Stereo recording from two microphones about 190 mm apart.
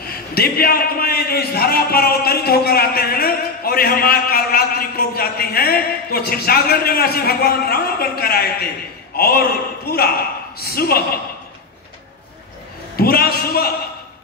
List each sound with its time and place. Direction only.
0.0 s a man's voice: 50° left (ahead or behind)
12.9 s a man's voice: 55° left (ahead or behind)